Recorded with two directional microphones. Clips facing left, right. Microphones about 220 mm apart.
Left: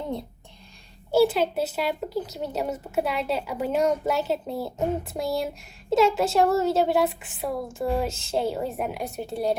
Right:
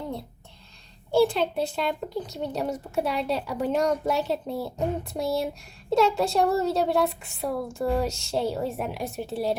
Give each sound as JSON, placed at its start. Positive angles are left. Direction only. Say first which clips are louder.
{"t": 1.1, "sound": "a woman's voice", "louder": "left 1 dB", "side_deg": 5}